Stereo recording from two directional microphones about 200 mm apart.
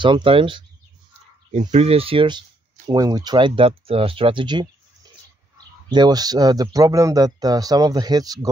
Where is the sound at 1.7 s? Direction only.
30° right (ahead or behind).